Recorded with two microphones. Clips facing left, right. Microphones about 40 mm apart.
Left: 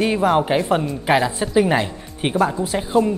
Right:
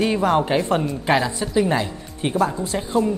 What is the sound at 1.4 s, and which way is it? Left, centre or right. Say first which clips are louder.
Speech: left 3 dB; centre.